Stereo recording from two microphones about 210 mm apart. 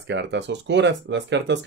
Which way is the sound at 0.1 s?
55° right (ahead or behind).